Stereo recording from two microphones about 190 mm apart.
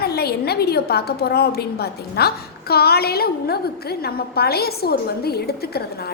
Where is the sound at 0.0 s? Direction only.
55° left (ahead or behind).